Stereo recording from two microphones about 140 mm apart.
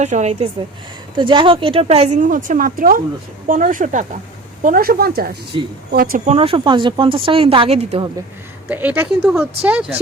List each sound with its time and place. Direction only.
0.0 s a woman's voice: 55° right (ahead or behind)
1.1 s speech: 35° right (ahead or behind); by 3.0 s 90° right
3.4 s speech: 70° right (ahead or behind)
4.6 s speech: 85° right
6.2 s speech: 45° right (ahead or behind)
8.7 s speech: 10° right (ahead or behind)